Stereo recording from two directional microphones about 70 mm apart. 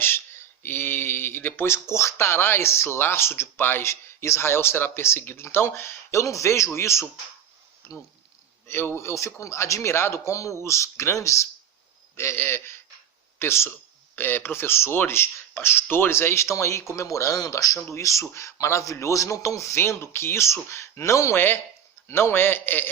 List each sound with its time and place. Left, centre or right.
0.0 s a man's voice: left
17.7 s a man's voice: left
21.3 s speech: left